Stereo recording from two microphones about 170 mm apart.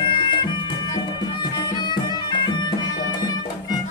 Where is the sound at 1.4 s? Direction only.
25° left (ahead or behind).